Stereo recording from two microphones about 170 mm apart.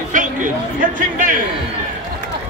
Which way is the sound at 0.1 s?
50° right (ahead or behind).